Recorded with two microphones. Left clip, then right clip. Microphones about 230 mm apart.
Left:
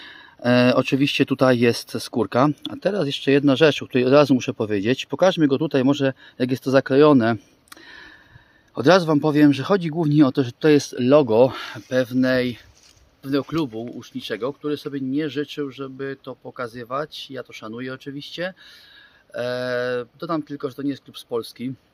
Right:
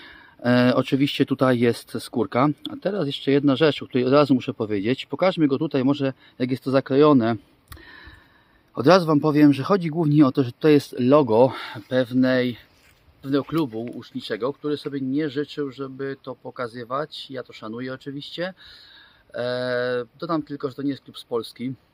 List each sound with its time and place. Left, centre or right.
0.0 s speech: centre
7.9 s sniff: centre
8.7 s speech: centre